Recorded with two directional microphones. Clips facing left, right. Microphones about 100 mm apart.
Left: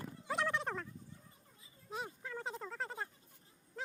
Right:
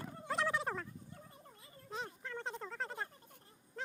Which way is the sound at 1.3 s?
60° right (ahead or behind).